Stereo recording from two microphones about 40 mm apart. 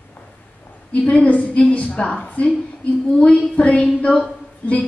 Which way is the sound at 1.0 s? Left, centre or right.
Left.